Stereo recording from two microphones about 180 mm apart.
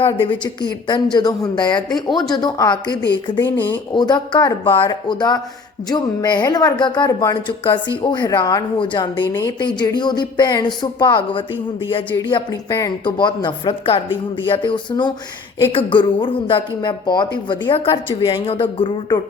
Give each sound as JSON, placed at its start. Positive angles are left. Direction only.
{"t": 0.0, "sound": "a woman's voice", "side_deg": 30}
{"t": 1.9, "sound": "speech", "side_deg": 0}
{"t": 2.3, "sound": "a woman's voice", "side_deg": 25}